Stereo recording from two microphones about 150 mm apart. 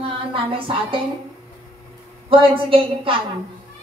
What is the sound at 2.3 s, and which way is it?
Speech, 35° right (ahead or behind).